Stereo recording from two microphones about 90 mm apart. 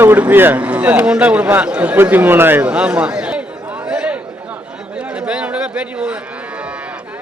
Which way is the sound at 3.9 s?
10° right (ahead or behind).